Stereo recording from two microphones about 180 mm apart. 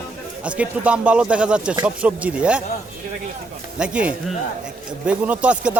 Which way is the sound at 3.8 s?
5° right (ahead or behind).